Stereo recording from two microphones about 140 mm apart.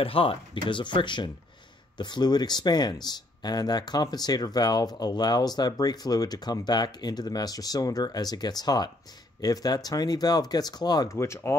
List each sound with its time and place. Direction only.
0.0 s speech: 40° left (ahead or behind); by 11.5 s 20° left (ahead or behind)